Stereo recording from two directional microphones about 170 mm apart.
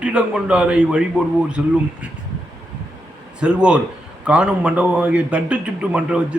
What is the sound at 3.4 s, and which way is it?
A man's voice, 5° right (ahead or behind).